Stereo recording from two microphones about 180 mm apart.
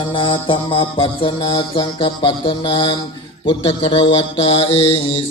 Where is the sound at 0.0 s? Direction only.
25° left (ahead or behind).